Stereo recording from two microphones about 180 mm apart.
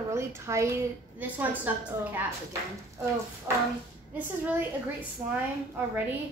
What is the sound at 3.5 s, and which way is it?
A woman's voice, 15° right (ahead or behind).